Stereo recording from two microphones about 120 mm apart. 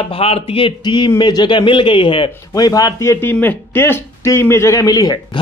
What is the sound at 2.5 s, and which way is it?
A man's voice, 30° left (ahead or behind).